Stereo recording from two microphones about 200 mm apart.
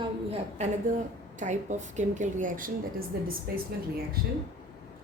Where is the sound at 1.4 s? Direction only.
35° right (ahead or behind).